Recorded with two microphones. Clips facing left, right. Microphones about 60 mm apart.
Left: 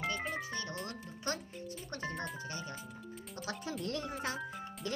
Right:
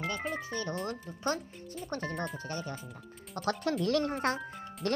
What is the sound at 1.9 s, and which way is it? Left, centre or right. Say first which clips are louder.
Speech: right 5 dB; right.